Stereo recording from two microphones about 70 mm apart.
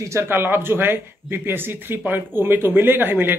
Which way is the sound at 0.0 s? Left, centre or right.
Right.